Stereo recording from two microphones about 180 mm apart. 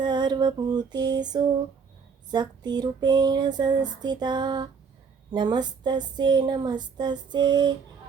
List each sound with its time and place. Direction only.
0.0 s speech: 25° right (ahead or behind)